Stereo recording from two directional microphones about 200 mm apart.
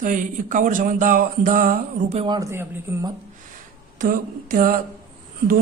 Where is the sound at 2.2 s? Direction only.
20° right (ahead or behind).